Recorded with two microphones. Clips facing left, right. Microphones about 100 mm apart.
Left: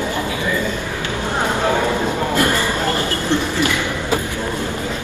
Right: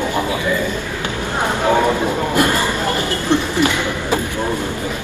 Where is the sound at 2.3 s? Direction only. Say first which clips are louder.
Right 2 dB; 15° right (ahead or behind).